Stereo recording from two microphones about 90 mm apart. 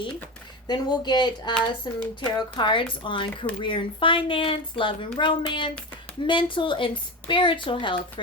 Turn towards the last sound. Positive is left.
turn(degrees=70)  # may be behind; listen again after turning